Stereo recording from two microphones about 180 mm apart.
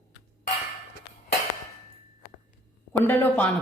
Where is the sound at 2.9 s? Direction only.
10° left (ahead or behind).